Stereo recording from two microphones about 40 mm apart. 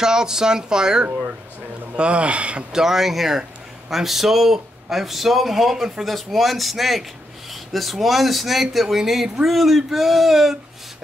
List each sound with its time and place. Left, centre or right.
0.0 s speech: centre
2.0 s speech: right
2.7 s speech: centre